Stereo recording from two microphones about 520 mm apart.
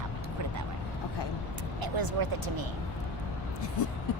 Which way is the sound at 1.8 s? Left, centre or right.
Right.